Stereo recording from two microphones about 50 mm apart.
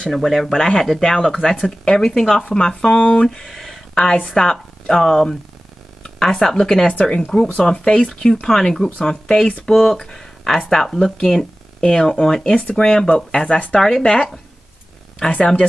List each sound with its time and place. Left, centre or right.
0.1 s speech: centre
3.3 s speech: centre
6.9 s speech: left
12.5 s speech: left